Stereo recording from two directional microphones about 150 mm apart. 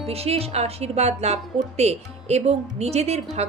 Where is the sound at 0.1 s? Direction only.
40° right (ahead or behind).